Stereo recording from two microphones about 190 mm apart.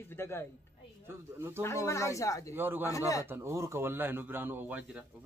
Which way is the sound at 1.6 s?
15° left (ahead or behind).